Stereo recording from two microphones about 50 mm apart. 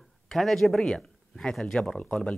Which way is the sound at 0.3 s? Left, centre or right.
Centre.